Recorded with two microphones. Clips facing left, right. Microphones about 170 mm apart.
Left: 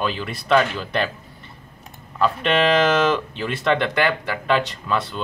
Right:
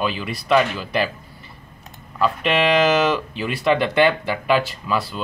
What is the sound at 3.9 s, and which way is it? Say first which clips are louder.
Speech: right 4 dB; 20° right (ahead or behind).